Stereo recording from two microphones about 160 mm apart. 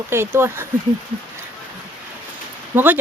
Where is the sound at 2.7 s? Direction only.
10° right (ahead or behind).